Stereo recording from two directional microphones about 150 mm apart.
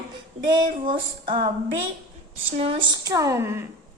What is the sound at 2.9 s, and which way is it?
Speech, 25° right (ahead or behind).